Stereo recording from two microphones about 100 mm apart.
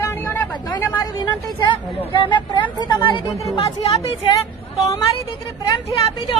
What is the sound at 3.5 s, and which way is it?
Speech, 80° left.